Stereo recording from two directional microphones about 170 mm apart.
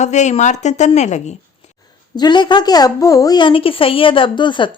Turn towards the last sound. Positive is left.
turn(degrees=30)  # may be behind; listen again after turning